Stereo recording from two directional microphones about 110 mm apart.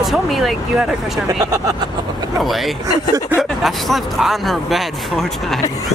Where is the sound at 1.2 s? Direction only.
30° right (ahead or behind).